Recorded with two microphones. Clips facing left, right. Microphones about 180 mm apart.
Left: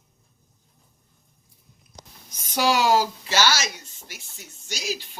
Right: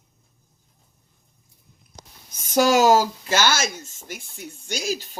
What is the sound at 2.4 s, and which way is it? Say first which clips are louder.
Speech: right 5 dB; 45° right (ahead or behind).